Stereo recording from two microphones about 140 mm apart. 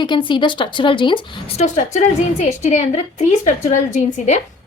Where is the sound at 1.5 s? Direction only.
55° left (ahead or behind).